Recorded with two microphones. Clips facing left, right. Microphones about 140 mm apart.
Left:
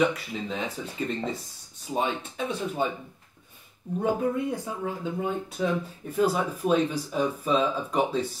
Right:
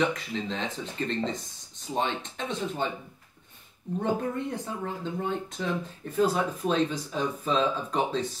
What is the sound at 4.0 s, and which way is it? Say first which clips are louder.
Speech: left 3 dB; 10° left (ahead or behind).